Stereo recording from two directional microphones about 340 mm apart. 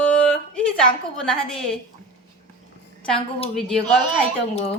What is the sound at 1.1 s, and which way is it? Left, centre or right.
Speech, centre.